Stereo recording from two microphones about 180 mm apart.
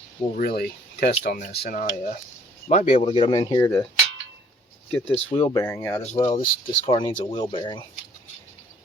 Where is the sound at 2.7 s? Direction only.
35° left (ahead or behind).